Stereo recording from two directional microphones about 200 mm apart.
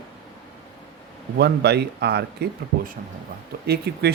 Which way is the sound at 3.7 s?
55° right (ahead or behind).